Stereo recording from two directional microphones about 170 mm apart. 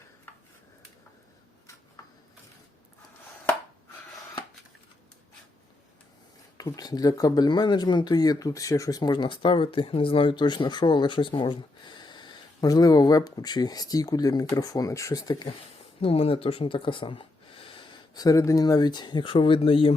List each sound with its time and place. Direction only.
6.6 s speech: 20° left (ahead or behind)
16.0 s speech: 35° left (ahead or behind)